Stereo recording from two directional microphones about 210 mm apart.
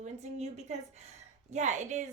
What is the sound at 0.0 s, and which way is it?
A woman's voice, 30° right (ahead or behind).